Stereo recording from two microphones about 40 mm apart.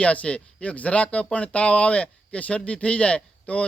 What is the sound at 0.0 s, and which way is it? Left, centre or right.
Speech, left.